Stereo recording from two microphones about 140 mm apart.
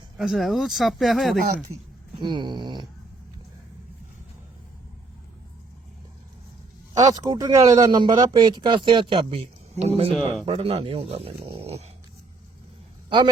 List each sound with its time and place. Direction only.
0.2 s speech: centre (ahead or behind)
2.1 s speech: 35° right (ahead or behind)
6.9 s speech: 25° right (ahead or behind); by 11.9 s 50° right (ahead or behind)
13.1 s a man's voice: 35° right (ahead or behind)